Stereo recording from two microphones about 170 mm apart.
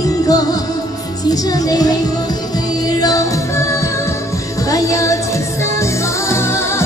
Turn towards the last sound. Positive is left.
turn(degrees=15)  # may be behind; listen again after turning